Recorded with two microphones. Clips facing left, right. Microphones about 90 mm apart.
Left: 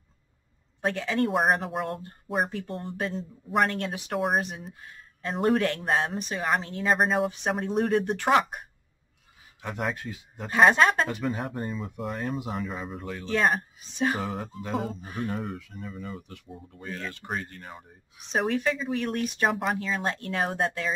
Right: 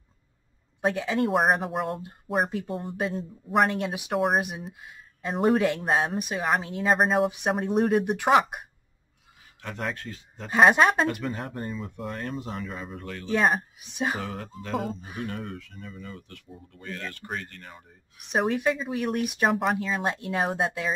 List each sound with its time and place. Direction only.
0.8 s speech: 10° right (ahead or behind)
3.7 s speech: 15° right (ahead or behind)
4.1 s speech: centre (ahead or behind)
4.4 s speech: 15° right (ahead or behind)
7.2 s speech: 15° right (ahead or behind)
9.6 s speech: 10° left (ahead or behind)
10.5 s speech: 15° right (ahead or behind)
11.2 s speech: centre (ahead or behind)
13.0 s speech: 15° left (ahead or behind)
13.3 s speech: 10° right (ahead or behind)
14.2 s speech: centre (ahead or behind); by 17.8 s 15° left (ahead or behind)
18.4 s speech: 10° right (ahead or behind)
19.4 s speech: centre (ahead or behind)